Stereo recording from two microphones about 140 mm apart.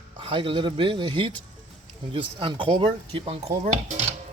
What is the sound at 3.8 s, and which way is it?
Dishes, 50° right (ahead or behind).